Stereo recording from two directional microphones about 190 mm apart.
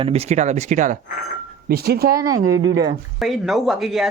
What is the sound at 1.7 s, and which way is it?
Speech, 55° right (ahead or behind).